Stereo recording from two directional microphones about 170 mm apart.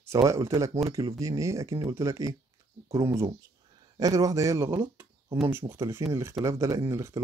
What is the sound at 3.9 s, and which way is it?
Speech, 20° right (ahead or behind).